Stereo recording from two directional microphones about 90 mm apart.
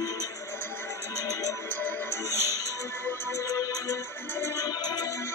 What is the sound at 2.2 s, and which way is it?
Music, 30° right (ahead or behind).